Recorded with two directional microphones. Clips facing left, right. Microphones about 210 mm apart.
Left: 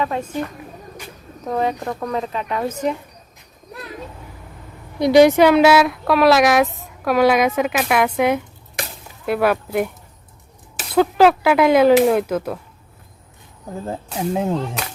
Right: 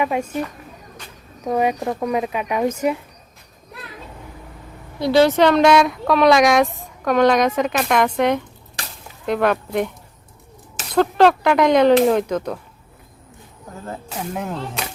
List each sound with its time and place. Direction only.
0.0 s speech: 10° right (ahead or behind)
1.5 s speech: 10° right (ahead or behind)
4.9 s speech: 15° left (ahead or behind)
10.9 s speech: 5° left (ahead or behind)
14.3 s speech: 25° left (ahead or behind)